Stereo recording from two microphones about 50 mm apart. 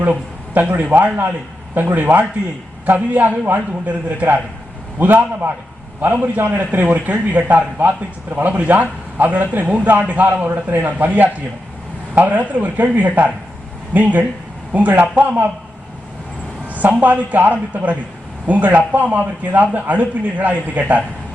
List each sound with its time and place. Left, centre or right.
0.0 s a sound: right
0.7 s a man's voice: right
4.9 s a man's voice: right
16.6 s a man's voice: right